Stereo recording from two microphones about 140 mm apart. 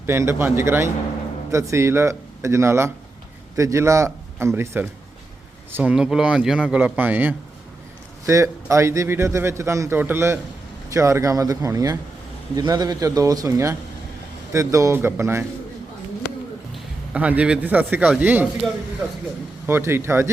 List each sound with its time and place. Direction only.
0.0 s a man's voice: 20° right (ahead or behind)
17.2 s a man's voice: 10° right (ahead or behind)
19.6 s a man's voice: 15° right (ahead or behind)